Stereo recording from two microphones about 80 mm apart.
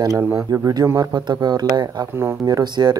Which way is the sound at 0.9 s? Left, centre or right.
Right.